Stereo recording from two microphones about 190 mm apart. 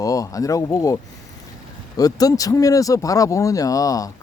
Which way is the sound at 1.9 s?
20° left (ahead or behind).